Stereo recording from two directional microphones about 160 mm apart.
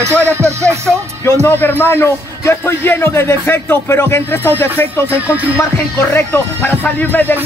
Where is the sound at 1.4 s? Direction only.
10° left (ahead or behind).